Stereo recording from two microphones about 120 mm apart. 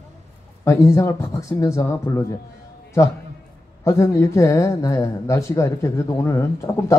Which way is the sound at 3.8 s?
25° left (ahead or behind).